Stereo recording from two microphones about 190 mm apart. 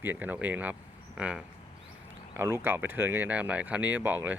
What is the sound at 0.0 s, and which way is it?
Speech, 10° right (ahead or behind).